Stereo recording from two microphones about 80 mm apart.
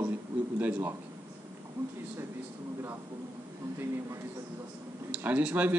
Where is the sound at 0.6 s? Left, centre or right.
Right.